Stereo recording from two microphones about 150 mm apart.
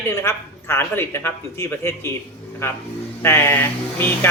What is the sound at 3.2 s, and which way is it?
A man's voice, 15° left (ahead or behind).